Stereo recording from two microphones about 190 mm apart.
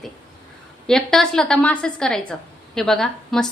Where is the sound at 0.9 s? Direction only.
5° left (ahead or behind).